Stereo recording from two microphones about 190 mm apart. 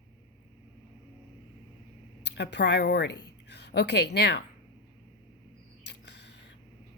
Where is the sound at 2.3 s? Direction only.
65° left (ahead or behind).